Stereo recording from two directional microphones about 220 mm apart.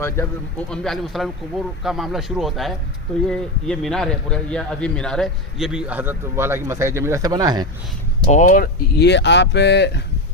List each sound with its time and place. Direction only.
0.7 s a man's voice: centre (ahead or behind); by 7.7 s 20° right (ahead or behind)
8.2 s speech: 35° left (ahead or behind); by 10.0 s 50° left (ahead or behind)